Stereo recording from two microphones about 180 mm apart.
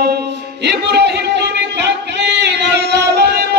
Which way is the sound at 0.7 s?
70° right (ahead or behind).